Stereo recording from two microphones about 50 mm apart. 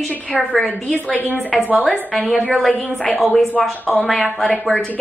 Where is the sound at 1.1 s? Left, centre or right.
Left.